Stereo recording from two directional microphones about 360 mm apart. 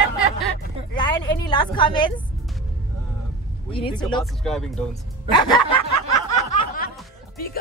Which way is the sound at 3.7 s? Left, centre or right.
Centre.